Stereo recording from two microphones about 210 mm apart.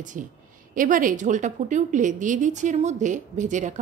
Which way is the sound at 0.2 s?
35° right (ahead or behind).